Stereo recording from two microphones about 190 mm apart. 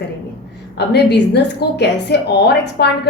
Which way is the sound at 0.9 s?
60° left (ahead or behind).